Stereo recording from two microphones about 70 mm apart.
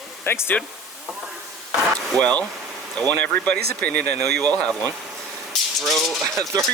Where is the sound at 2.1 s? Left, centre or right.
Left.